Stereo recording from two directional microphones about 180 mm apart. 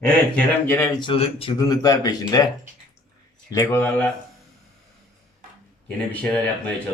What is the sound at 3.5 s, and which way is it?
Speech, 15° left (ahead or behind).